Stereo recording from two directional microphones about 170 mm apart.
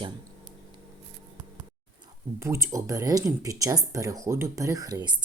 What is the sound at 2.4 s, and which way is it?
Speech, 15° right (ahead or behind).